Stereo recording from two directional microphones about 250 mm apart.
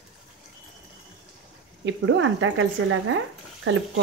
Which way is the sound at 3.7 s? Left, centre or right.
Right.